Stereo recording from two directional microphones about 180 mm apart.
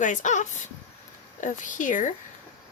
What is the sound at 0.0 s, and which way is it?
A woman's voice, 45° left (ahead or behind).